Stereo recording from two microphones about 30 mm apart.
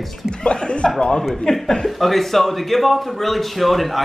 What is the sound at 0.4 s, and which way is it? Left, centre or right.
Speech, left.